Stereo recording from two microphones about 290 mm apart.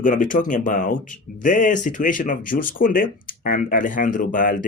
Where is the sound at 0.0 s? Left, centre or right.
Left.